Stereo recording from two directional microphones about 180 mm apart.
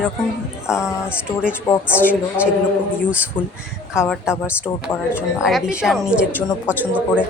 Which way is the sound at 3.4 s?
25° left (ahead or behind).